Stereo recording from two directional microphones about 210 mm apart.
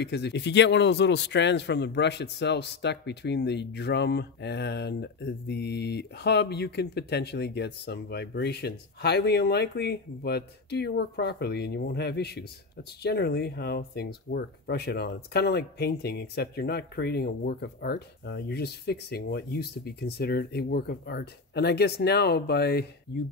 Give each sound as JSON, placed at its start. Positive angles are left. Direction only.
{"t": 0.0, "sound": "speech", "side_deg": 55}